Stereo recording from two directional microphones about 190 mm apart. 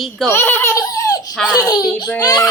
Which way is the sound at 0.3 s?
10° left (ahead or behind).